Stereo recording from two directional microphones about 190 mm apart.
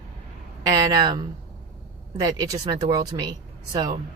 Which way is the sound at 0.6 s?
20° right (ahead or behind).